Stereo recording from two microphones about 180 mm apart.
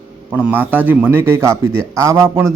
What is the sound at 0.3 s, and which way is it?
A man's voice, 10° right (ahead or behind).